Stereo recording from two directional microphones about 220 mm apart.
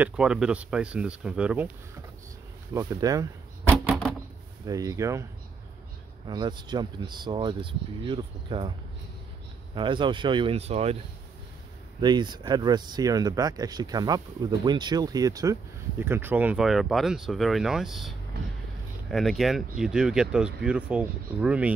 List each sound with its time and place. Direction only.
0.0 s speech: 5° right (ahead or behind)
2.7 s speech: 15° right (ahead or behind)
4.6 s speech: 15° right (ahead or behind)
6.2 s speech: 20° right (ahead or behind)
9.8 s speech: 20° right (ahead or behind)
12.0 s speech: 20° right (ahead or behind)